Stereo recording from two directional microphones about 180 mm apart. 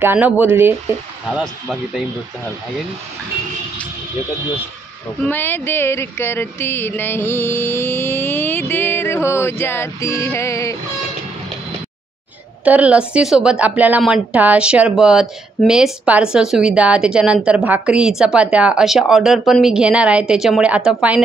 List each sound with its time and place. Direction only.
0.0 s speech: 10° right (ahead or behind)
5.2 s a sound: 10° left (ahead or behind)
12.6 s a woman's voice: 10° right (ahead or behind)